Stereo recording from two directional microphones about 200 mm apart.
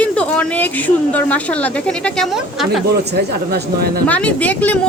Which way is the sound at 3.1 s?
55° right (ahead or behind).